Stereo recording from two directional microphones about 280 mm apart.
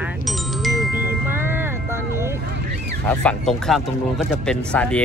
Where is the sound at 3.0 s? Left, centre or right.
Centre.